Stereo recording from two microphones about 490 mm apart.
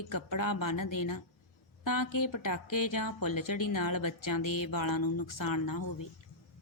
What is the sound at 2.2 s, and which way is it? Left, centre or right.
A woman's voice, left.